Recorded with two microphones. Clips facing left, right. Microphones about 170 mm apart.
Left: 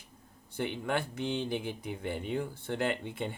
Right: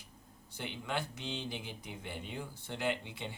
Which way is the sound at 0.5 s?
55° left (ahead or behind).